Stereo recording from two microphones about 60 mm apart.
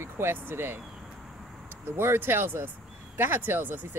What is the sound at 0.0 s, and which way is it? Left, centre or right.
Speech, right.